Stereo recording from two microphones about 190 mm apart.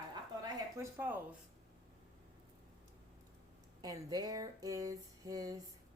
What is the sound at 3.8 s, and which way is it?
Speech, 20° right (ahead or behind).